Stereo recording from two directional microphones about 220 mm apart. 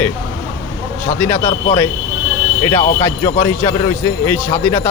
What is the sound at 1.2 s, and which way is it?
Speech, 10° left (ahead or behind).